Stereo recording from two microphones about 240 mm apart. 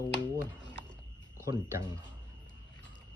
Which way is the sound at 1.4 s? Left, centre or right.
Centre.